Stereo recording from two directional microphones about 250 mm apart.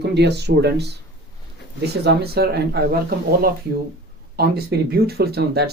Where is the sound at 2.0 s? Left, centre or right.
Right.